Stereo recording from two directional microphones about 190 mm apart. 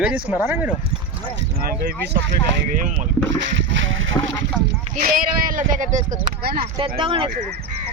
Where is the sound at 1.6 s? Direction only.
50° right (ahead or behind).